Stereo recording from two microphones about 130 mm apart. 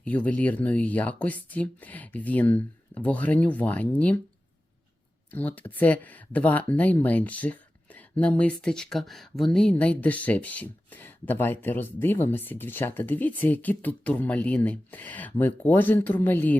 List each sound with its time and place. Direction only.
0.0 s speech: 10° left (ahead or behind)
5.3 s speech: 10° left (ahead or behind)